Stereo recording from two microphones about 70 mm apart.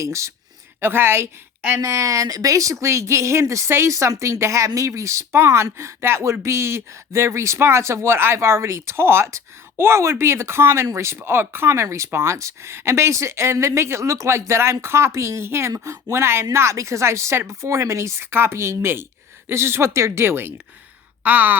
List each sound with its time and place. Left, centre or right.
0.0 s speech: right
0.8 s speech: right
1.8 s speech: right
21.2 s speech: right